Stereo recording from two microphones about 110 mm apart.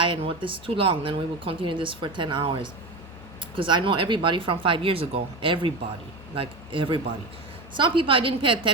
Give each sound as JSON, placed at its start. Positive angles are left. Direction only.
{"t": 0.0, "sound": "a woman's voice", "side_deg": -50}